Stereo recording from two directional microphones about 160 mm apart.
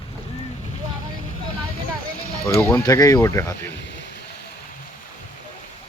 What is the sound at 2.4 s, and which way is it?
Speech, 10° left (ahead or behind).